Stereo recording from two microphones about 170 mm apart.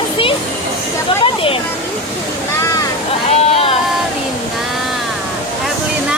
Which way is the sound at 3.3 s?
35° left (ahead or behind).